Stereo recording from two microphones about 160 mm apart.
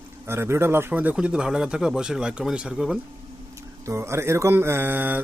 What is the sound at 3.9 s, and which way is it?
Speech, 15° right (ahead or behind).